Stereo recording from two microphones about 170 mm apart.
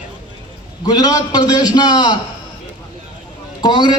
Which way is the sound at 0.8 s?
20° left (ahead or behind).